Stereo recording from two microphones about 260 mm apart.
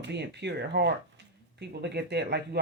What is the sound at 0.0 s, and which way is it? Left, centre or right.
Speech, right.